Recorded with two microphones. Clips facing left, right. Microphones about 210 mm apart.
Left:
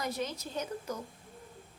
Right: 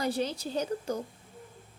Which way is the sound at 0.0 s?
30° right (ahead or behind).